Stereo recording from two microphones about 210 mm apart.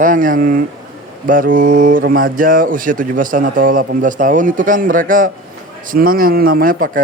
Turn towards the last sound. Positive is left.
turn(degrees=-40)  # may be behind; listen again after turning